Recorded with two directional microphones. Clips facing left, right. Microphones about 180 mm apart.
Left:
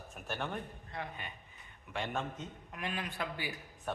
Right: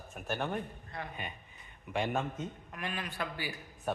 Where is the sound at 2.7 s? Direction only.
15° left (ahead or behind).